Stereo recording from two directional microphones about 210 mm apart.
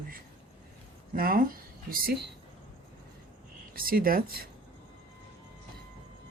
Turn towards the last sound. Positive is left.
turn(degrees=-45)  # may be behind; listen again after turning